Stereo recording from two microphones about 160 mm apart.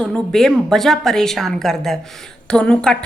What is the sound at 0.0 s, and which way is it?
A woman's voice, 5° left (ahead or behind).